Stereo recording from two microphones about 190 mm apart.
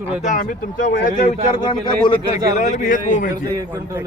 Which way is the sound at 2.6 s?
40° left (ahead or behind).